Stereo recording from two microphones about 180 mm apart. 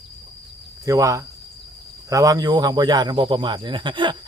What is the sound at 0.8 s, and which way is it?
Speech, 20° right (ahead or behind).